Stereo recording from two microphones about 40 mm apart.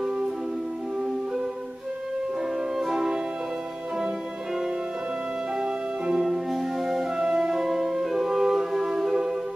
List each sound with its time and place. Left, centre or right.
2.8 s music: centre
5.6 s music: centre
6.2 s music: centre